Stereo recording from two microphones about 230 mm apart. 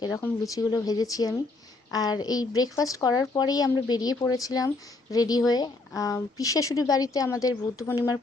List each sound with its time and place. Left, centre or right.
0.0 s speech: centre